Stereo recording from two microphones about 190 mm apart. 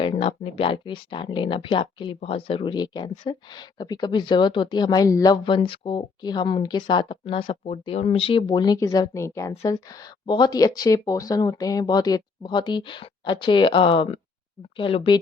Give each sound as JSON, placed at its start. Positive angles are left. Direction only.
{"t": 0.0, "sound": "speech", "side_deg": 30}